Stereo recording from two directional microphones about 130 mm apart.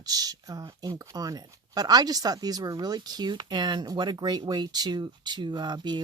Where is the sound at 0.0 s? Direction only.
30° right (ahead or behind).